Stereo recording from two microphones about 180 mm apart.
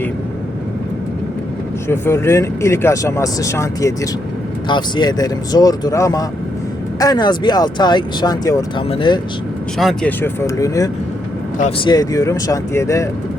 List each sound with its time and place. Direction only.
1.9 s speech: 15° left (ahead or behind)
9.7 s speech: 5° left (ahead or behind)
11.9 s speech: 20° left (ahead or behind)